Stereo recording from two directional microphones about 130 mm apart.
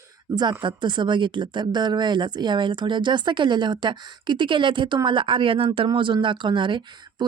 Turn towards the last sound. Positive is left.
turn(degrees=-40)  # may be behind; listen again after turning